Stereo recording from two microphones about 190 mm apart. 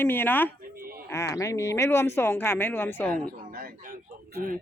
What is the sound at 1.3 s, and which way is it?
Speech, 15° left (ahead or behind).